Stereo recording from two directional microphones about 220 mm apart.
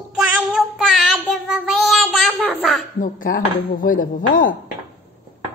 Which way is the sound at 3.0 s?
40° left (ahead or behind).